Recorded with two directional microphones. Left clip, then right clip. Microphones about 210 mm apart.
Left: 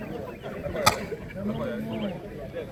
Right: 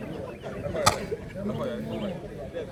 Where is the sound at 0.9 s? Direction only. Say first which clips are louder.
Left 1 dB; 55° right (ahead or behind).